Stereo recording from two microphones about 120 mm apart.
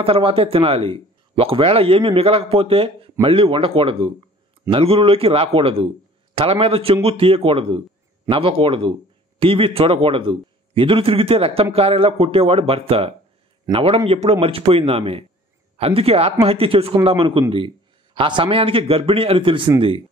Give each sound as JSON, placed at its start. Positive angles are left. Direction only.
{"t": 0.0, "sound": "speech", "side_deg": -50}